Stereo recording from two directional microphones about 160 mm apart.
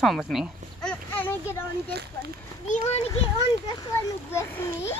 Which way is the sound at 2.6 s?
50° left (ahead or behind).